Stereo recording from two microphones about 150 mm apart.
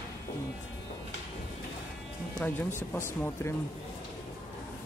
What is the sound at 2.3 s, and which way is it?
Speech, 10° left (ahead or behind).